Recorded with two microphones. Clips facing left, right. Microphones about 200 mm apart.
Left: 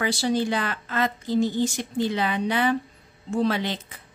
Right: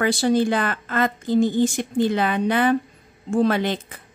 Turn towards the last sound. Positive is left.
turn(degrees=-50)  # may be behind; listen again after turning